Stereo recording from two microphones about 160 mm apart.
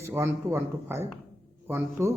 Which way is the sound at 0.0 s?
15° right (ahead or behind).